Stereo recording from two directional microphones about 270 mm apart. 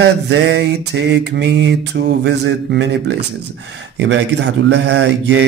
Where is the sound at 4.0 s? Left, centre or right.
Right.